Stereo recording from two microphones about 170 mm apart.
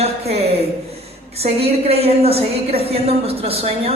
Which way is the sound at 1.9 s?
35° right (ahead or behind).